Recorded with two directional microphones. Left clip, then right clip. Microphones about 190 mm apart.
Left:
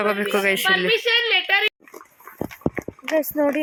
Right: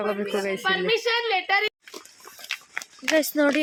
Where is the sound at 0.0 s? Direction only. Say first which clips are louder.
Left 6 dB; centre (ahead or behind).